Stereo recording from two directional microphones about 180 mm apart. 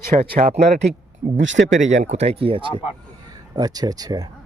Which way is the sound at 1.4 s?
85° right.